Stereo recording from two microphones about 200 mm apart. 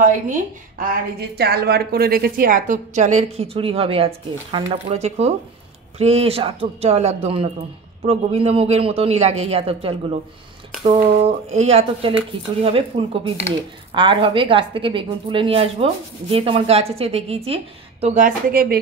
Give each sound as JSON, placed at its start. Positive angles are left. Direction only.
{"t": 0.0, "sound": "a woman's voice", "side_deg": -40}
{"t": 1.3, "sound": "a woman's voice", "side_deg": -55}